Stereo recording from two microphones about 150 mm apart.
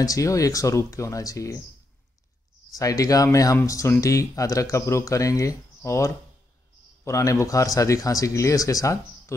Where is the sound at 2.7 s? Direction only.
25° left (ahead or behind).